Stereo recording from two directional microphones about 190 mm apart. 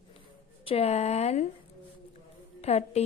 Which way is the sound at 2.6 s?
35° left (ahead or behind).